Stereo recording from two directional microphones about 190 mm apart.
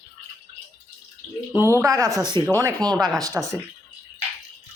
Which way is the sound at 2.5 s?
20° right (ahead or behind).